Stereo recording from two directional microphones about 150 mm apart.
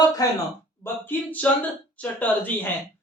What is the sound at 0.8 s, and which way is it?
Speech, 15° left (ahead or behind).